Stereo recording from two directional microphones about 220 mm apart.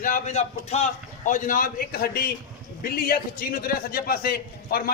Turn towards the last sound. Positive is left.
turn(degrees=45)  # may be behind; listen again after turning